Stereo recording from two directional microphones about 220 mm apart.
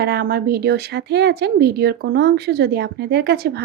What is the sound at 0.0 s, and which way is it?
Speech, 45° right (ahead or behind).